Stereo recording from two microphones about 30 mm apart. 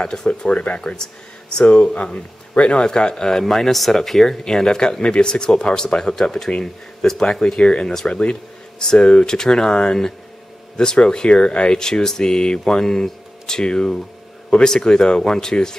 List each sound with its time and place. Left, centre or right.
0.0 s speech: left
0.5 s speech: left
0.7 s speech: left
1.6 s speech: left
2.8 s speech: left
3.4 s speech: centre
7.6 s speech: left
11.2 s speech: left
11.8 s speech: centre